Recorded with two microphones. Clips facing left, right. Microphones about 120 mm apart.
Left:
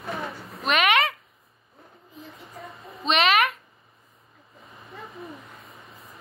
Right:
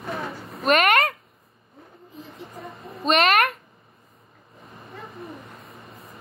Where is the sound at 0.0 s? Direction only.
Centre (ahead or behind).